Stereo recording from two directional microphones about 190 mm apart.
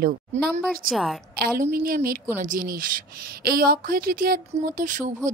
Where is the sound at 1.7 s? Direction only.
50° right (ahead or behind).